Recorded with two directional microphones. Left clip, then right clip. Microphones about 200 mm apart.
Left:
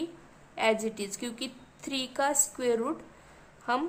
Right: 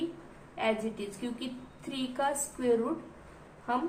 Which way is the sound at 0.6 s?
45° left (ahead or behind).